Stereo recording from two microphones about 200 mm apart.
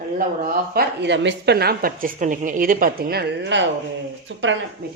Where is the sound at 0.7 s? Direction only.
55° right (ahead or behind).